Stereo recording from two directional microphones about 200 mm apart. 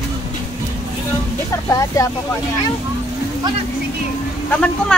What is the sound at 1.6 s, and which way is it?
Speech, 15° left (ahead or behind).